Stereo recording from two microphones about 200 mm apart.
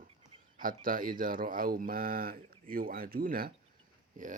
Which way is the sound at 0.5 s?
45° right (ahead or behind).